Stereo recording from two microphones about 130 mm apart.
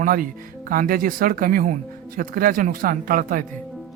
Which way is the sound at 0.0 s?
90° right.